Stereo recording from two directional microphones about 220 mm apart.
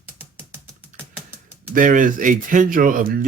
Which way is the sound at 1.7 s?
35° right (ahead or behind).